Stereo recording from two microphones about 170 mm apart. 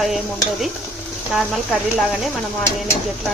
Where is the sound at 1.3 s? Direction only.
Centre (ahead or behind).